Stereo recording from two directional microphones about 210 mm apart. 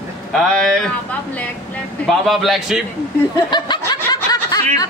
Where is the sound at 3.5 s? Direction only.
20° left (ahead or behind).